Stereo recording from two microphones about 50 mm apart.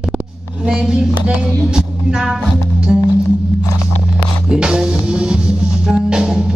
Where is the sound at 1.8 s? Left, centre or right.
Centre.